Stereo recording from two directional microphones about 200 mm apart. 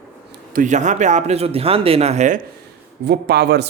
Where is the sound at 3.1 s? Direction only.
55° right (ahead or behind).